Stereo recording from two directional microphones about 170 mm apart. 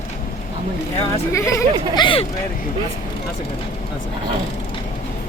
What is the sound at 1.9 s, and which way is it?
Speech, 30° left (ahead or behind).